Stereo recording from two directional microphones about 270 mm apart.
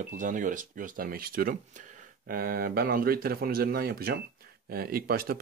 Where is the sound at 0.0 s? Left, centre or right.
Right.